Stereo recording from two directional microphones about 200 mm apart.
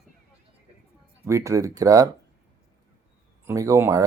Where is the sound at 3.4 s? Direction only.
15° right (ahead or behind).